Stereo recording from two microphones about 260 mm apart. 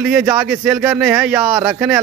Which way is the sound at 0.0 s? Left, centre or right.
Centre.